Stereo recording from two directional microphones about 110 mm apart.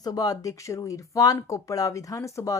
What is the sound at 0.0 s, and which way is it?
Speech, 35° left (ahead or behind).